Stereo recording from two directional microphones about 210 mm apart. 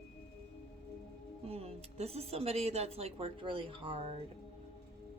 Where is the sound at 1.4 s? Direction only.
30° right (ahead or behind).